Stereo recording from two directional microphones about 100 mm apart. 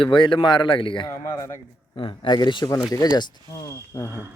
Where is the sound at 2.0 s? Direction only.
55° left (ahead or behind).